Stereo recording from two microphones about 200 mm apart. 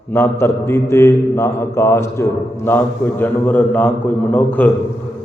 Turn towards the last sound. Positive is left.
turn(degrees=10)  # may be behind; listen again after turning